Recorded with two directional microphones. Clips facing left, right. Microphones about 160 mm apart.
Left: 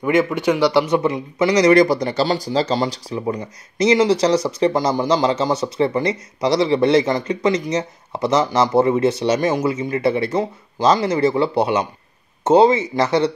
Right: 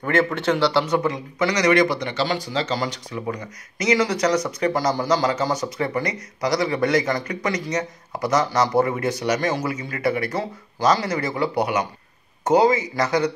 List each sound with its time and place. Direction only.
0.0 s a man's voice: 15° left (ahead or behind); by 13.3 s 30° left (ahead or behind)